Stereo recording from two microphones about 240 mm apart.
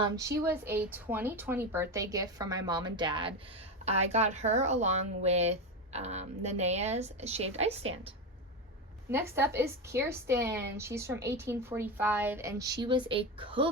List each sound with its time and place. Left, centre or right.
0.4 s a woman's voice: centre; by 8.1 s right
9.0 s a woman's voice: centre